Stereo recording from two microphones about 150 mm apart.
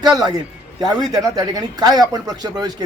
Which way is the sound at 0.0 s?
25° right (ahead or behind).